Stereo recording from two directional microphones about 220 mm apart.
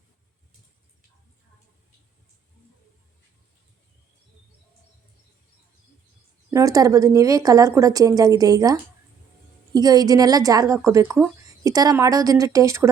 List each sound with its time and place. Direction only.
6.5 s a woman's voice: 15° right (ahead or behind)